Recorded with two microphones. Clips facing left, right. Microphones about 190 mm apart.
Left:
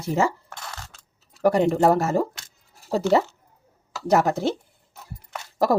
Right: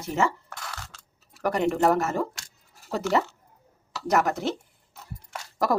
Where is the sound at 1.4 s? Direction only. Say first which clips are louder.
Left 4 dB; 30° left (ahead or behind).